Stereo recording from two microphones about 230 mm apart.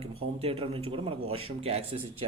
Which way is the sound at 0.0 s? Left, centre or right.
Right.